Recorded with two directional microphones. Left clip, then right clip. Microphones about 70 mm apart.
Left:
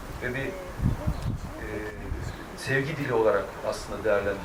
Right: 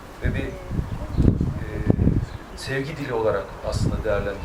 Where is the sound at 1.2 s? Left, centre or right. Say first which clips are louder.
Right 15 dB; left.